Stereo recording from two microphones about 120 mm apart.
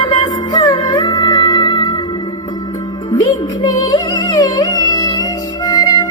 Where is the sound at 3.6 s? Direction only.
30° left (ahead or behind).